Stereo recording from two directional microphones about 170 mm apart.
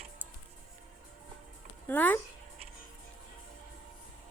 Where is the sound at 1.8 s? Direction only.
10° left (ahead or behind).